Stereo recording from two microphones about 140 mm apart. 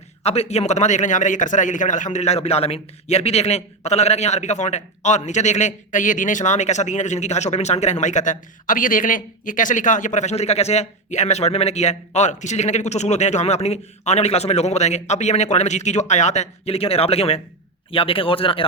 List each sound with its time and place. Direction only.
0.2 s a man's voice: 50° left (ahead or behind)